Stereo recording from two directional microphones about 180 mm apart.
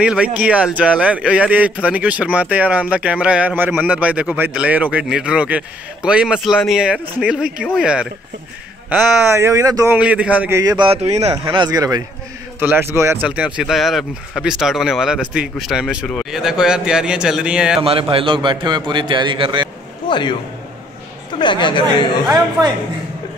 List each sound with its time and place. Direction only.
0.0 s speech: 5° right (ahead or behind)
9.9 s speech: 5° right (ahead or behind)
10.6 s a man's voice: 25° right (ahead or behind); by 17.8 s 5° right (ahead or behind)
18.1 s a man's voice: 25° right (ahead or behind)
20.1 s a man's voice: 25° left (ahead or behind)
21.4 s speech: 25° left (ahead or behind)